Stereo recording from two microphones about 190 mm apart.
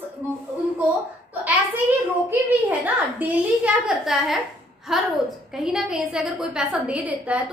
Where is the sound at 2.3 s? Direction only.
10° right (ahead or behind).